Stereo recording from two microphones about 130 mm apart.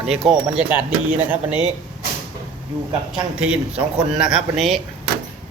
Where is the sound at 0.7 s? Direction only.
15° right (ahead or behind).